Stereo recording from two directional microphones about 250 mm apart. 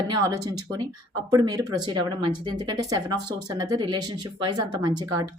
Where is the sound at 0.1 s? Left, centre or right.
Centre.